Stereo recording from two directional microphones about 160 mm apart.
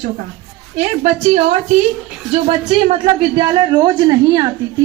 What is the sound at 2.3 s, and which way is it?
A woman's voice, 35° right (ahead or behind).